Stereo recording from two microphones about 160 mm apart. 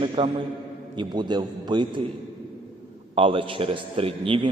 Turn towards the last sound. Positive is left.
turn(degrees=-35)  # may be behind; listen again after turning